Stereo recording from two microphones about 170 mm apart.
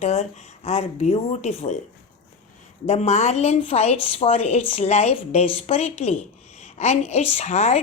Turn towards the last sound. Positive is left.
turn(degrees=40)  # may be behind; listen again after turning